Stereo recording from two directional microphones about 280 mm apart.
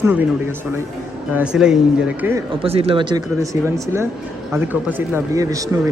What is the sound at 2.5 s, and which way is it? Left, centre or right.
Speech, centre.